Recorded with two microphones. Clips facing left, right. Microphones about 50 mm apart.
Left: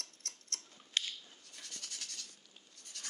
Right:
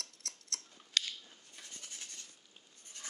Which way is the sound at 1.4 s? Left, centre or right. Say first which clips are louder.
Left 1 dB; right.